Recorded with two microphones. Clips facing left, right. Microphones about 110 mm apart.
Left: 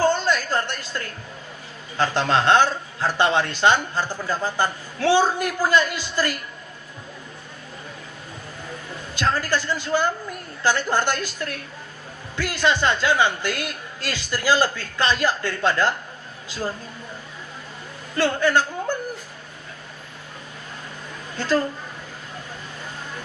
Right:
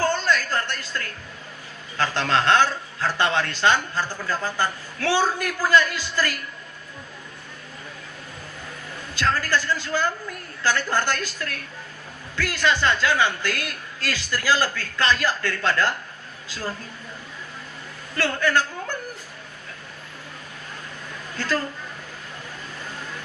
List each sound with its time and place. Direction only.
0.0 s a sound: 20° left (ahead or behind)
2.0 s a man's voice: 20° left (ahead or behind)
9.1 s a man's voice: 20° left (ahead or behind)
18.2 s speech: 20° left (ahead or behind)
21.3 s a woman's voice: 20° left (ahead or behind)